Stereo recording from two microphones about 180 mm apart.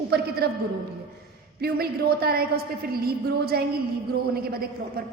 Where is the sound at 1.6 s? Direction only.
60° right (ahead or behind).